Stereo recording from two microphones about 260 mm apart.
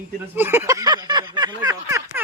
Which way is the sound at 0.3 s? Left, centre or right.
Centre.